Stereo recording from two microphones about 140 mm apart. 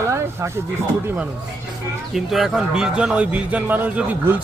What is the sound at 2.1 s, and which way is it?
A man's voice, centre (ahead or behind).